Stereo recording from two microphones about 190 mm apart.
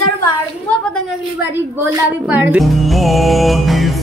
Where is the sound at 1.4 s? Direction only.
10° right (ahead or behind).